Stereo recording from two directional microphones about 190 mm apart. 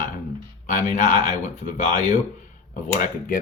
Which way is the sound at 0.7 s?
40° left (ahead or behind).